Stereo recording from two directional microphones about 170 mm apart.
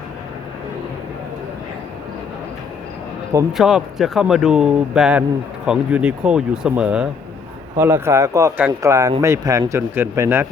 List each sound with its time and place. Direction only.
3.6 s speech: centre (ahead or behind)